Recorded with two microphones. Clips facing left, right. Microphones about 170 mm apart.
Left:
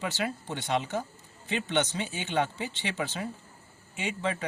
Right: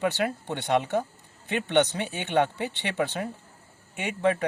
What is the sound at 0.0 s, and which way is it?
Speech, 60° right (ahead or behind).